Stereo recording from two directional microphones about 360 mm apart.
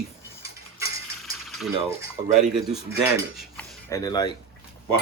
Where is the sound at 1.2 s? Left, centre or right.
Centre.